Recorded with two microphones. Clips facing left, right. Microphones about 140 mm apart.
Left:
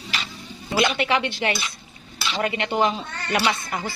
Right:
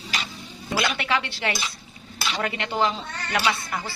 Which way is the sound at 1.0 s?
20° left (ahead or behind).